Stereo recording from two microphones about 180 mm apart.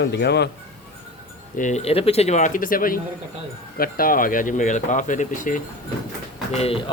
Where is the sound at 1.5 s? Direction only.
45° left (ahead or behind).